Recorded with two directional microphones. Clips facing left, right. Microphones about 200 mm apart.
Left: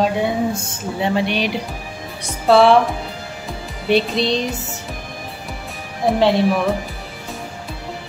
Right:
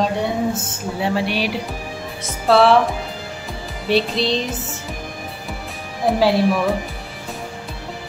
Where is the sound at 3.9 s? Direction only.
Centre (ahead or behind).